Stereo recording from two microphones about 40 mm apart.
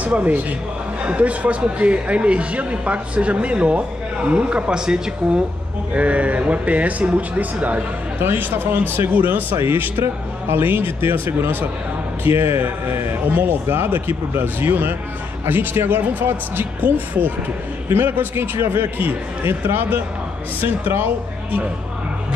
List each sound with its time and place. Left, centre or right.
0.0 s speech: right; by 5.1 s centre
5.9 s speech: right
8.2 s speech: right
12.3 s a man's voice: right
13.8 s speech: right
16.8 s speech: right
17.8 s speech: right
18.3 s speech: right